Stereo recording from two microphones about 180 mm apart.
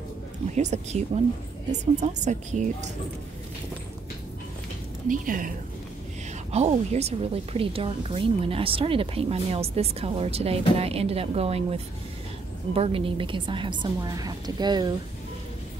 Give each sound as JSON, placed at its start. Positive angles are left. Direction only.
{"t": 0.5, "sound": "a woman's voice", "side_deg": -40}
{"t": 5.0, "sound": "a woman's voice", "side_deg": -50}
{"t": 6.5, "sound": "a woman's voice", "side_deg": -35}